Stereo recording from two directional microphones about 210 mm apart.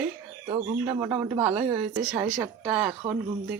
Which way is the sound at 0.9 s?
15° right (ahead or behind).